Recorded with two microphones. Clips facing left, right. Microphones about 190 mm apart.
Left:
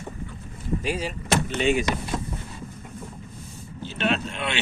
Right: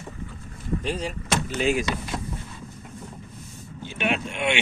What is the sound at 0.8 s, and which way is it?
Speech, 10° left (ahead or behind).